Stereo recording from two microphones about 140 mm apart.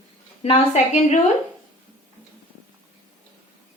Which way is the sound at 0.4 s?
50° left (ahead or behind).